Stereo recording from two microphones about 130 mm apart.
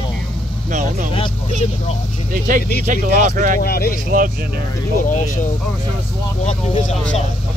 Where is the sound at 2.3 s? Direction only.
90° right.